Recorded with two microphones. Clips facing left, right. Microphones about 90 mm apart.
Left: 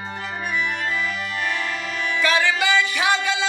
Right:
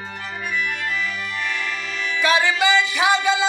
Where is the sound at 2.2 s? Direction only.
10° right (ahead or behind).